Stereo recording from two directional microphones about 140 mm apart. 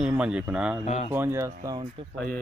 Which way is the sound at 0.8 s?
55° left (ahead or behind).